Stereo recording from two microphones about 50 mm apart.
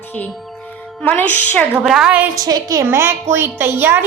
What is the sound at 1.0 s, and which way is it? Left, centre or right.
Speech, left.